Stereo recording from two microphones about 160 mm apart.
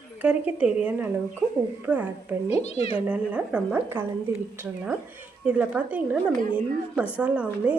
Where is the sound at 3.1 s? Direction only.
10° right (ahead or behind).